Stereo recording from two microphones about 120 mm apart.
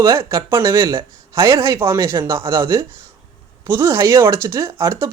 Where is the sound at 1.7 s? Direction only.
20° right (ahead or behind).